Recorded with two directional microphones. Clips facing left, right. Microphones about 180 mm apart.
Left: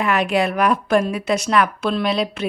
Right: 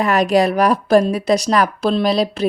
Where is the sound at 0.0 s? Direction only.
40° right (ahead or behind).